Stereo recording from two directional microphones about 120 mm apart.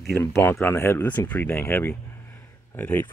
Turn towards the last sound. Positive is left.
turn(degrees=15)  # may be behind; listen again after turning